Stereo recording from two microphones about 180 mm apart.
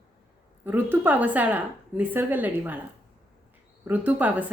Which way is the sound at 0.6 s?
10° right (ahead or behind).